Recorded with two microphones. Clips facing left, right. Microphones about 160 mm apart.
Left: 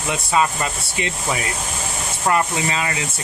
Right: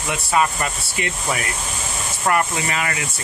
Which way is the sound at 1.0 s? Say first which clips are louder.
Left 1 dB; 25° left (ahead or behind).